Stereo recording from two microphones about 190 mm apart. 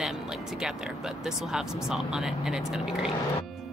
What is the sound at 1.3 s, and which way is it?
A woman's voice, 5° right (ahead or behind).